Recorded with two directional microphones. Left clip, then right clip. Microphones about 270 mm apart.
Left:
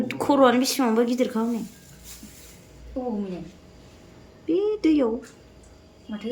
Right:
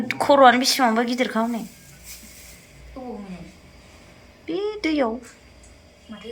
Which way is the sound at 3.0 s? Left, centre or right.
Left.